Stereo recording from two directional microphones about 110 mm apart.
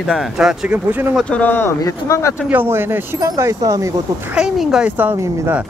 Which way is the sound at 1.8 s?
30° left (ahead or behind).